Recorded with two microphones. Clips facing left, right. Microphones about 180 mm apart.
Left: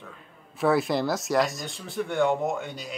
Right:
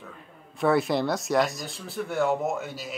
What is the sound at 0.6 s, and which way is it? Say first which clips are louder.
Speech: even; centre (ahead or behind).